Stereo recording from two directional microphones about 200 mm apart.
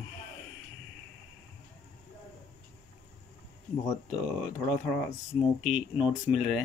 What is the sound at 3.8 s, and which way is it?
Speech, 15° left (ahead or behind).